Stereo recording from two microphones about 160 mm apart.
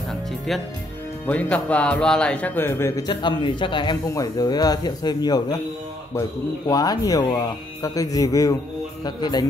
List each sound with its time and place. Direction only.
0.5 s speech: centre (ahead or behind)
3.1 s speech: 30° left (ahead or behind)
6.7 s speech: 25° left (ahead or behind)